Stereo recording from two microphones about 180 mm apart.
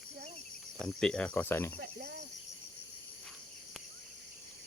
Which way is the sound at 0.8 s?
5° left (ahead or behind).